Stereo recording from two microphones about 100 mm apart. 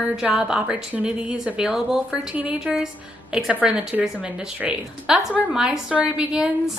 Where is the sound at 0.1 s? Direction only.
5° right (ahead or behind).